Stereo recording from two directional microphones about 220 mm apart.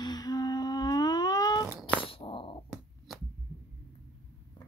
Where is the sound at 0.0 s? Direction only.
20° left (ahead or behind).